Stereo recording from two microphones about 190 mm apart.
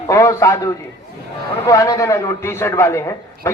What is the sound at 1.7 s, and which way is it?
A man's voice, 15° left (ahead or behind).